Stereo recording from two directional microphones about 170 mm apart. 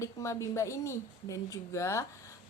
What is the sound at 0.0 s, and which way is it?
A woman's voice, 15° left (ahead or behind).